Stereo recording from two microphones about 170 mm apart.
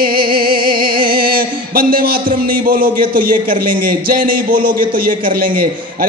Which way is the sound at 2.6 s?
55° right (ahead or behind).